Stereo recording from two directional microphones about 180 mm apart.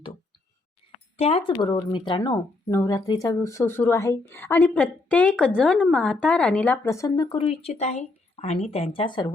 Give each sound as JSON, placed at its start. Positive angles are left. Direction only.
{"t": 1.1, "sound": "a woman's voice", "side_deg": 35}